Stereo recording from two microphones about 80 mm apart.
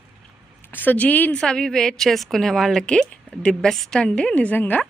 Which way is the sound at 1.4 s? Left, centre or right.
Centre.